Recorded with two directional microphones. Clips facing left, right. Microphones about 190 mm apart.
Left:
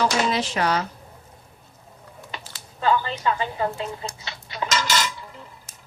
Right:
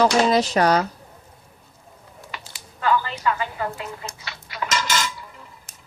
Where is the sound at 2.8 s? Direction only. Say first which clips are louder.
Even; 25° left (ahead or behind).